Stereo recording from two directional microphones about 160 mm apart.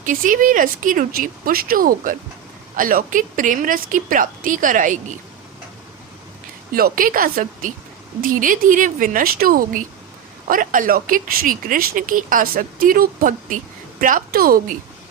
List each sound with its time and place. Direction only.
0.0 s speech: 55° right (ahead or behind)
6.7 s speech: 65° right (ahead or behind)